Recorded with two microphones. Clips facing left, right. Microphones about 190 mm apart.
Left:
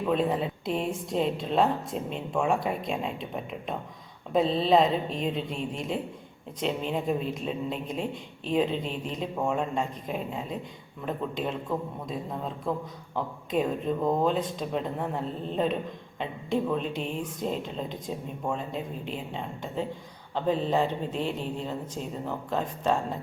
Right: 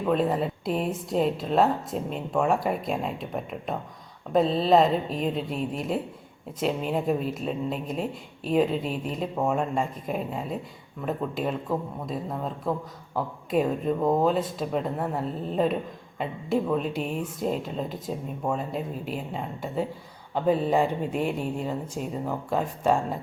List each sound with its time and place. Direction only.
0.0 s speech: centre (ahead or behind)